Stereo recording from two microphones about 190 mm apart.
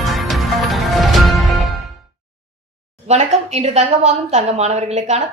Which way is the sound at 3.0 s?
35° right (ahead or behind).